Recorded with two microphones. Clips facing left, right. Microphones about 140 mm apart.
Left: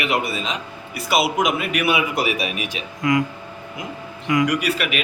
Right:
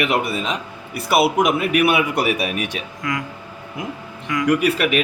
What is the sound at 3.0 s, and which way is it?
Speech, 20° left (ahead or behind).